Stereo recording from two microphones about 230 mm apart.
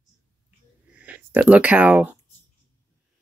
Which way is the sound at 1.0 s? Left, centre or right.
Centre.